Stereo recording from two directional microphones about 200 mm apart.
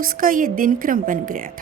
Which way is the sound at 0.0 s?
45° right (ahead or behind).